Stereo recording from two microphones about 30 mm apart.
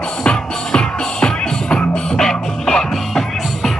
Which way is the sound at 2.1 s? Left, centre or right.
Left.